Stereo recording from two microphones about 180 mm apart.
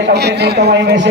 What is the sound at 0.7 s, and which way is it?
Speech, 80° right.